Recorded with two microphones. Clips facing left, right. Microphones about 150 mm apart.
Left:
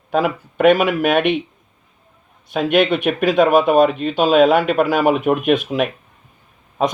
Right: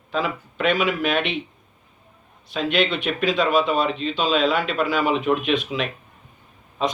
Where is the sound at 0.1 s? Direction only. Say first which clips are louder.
Left 7 dB; 55° left (ahead or behind).